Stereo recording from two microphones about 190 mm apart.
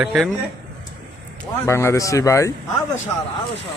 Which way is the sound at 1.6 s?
15° left (ahead or behind).